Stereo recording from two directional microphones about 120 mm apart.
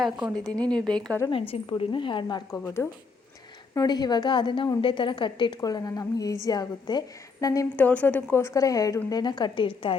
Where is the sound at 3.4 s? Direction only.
35° left (ahead or behind).